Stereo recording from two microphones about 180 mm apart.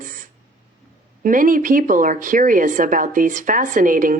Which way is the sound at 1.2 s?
50° right (ahead or behind).